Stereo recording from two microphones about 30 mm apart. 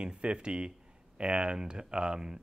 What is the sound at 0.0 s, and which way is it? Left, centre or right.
Speech, right.